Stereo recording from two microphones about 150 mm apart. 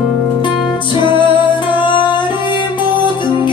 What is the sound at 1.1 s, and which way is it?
Music, 30° left (ahead or behind).